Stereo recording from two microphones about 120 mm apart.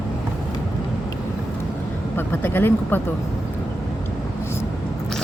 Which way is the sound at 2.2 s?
15° left (ahead or behind).